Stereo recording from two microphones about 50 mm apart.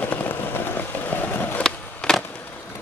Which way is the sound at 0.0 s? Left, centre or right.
Left.